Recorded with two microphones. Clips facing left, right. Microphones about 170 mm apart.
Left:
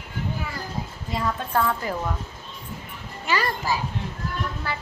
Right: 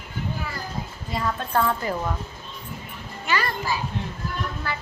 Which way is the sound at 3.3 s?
35° left (ahead or behind).